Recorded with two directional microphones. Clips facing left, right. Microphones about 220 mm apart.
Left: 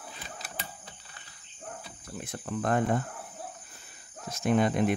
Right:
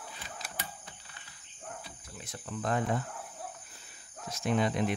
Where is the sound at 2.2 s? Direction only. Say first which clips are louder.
Left 5 dB; 55° left (ahead or behind).